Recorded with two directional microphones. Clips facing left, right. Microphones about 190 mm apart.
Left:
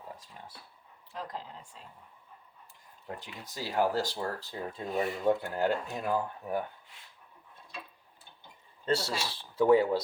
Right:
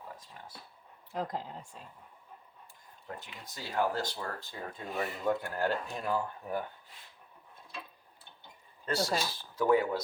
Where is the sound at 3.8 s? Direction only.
35° left (ahead or behind).